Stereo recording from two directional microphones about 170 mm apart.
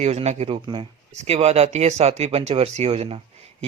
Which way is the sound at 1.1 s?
40° right (ahead or behind).